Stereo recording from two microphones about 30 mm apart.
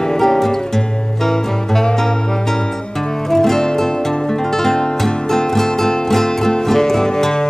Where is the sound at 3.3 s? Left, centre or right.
Centre.